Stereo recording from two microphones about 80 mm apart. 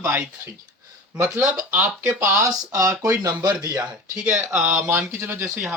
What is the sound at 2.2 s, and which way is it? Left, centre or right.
Speech, right.